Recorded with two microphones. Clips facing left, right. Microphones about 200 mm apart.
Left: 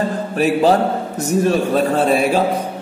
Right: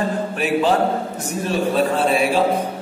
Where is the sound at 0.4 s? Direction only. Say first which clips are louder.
Left 5 dB; 40° left (ahead or behind).